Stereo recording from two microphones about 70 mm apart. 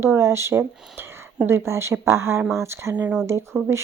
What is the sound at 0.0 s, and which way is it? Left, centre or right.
A woman's voice, right.